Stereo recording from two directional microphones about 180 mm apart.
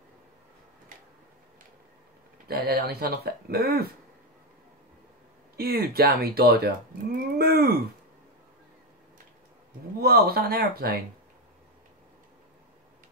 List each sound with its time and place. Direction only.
2.4 s speech: 60° right (ahead or behind)
5.6 s speech: 60° right (ahead or behind)
9.9 s speech: 60° right (ahead or behind)